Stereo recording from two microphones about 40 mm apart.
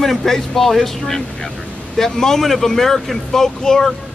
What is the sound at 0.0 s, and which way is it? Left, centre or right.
Speech, centre.